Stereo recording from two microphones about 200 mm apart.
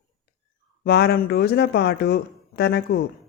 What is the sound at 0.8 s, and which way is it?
Speech, 50° left (ahead or behind).